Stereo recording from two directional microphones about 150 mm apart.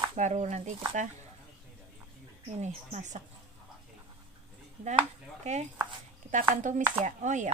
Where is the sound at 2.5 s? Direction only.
50° right (ahead or behind).